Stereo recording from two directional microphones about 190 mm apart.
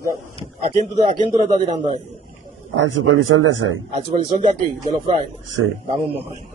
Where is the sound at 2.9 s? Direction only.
90° right.